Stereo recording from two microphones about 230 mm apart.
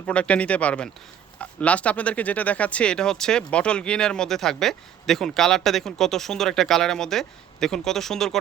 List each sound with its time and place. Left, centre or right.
0.0 s speech: centre